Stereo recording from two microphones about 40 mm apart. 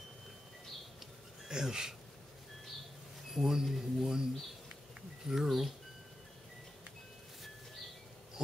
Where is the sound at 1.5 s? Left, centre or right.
Centre.